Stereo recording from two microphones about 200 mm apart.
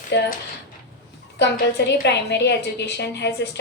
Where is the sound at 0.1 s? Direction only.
60° left (ahead or behind).